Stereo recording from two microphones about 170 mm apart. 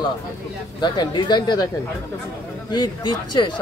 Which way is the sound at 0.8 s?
25° left (ahead or behind).